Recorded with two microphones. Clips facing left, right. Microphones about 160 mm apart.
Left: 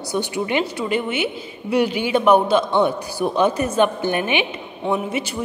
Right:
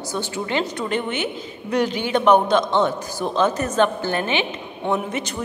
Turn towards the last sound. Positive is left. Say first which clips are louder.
# left 2 dB
turn(degrees=10)  # may be behind; listen again after turning